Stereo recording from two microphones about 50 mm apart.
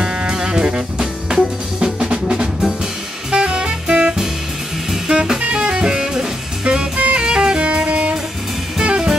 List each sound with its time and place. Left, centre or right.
0.0 s music: centre
3.3 s saxophone: centre
5.0 s music: centre